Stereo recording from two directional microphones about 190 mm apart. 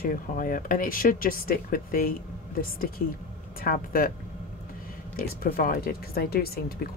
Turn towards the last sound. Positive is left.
turn(degrees=55)  # may be behind; listen again after turning